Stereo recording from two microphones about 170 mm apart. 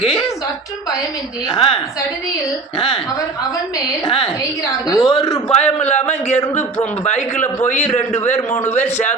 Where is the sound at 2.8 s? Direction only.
35° left (ahead or behind).